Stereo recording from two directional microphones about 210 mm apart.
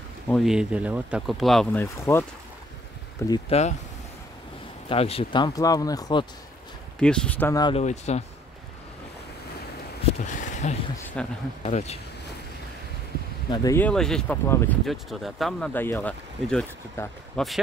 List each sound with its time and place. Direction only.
0.3 s speech: centre (ahead or behind)
3.3 s speech: 30° left (ahead or behind)
4.8 s speech: 30° left (ahead or behind)
7.0 s speech: 5° left (ahead or behind)
7.7 s speech: 30° left (ahead or behind)
10.2 s speech: 35° left (ahead or behind)
11.2 s speech: 5° left (ahead or behind)
11.6 s speech: 30° left (ahead or behind)
13.5 s speech: 15° left (ahead or behind)